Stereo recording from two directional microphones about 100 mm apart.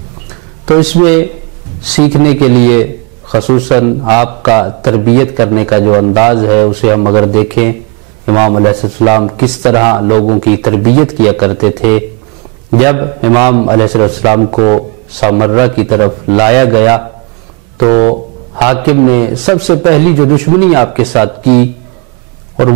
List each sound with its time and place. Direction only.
0.7 s a man's voice: 5° right (ahead or behind)